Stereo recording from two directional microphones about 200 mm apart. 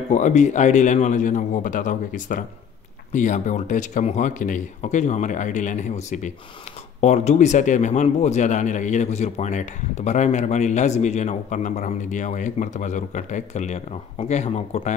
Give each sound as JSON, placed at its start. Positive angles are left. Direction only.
{"t": 0.1, "sound": "speech", "side_deg": 35}